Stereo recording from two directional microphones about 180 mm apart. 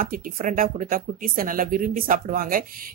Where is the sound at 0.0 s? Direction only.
50° right (ahead or behind).